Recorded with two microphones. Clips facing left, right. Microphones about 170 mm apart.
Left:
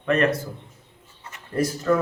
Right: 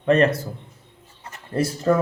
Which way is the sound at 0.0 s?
30° right (ahead or behind).